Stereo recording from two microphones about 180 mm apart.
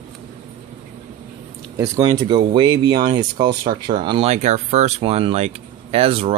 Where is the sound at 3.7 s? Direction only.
35° right (ahead or behind).